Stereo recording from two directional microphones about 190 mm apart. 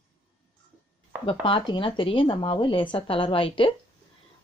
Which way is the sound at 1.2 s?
30° left (ahead or behind).